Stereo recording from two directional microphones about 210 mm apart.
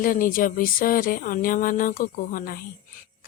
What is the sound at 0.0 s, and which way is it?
A woman's voice, 40° left (ahead or behind).